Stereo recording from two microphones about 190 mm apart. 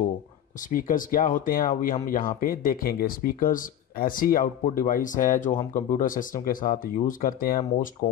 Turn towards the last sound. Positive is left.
turn(degrees=45)  # may be behind; listen again after turning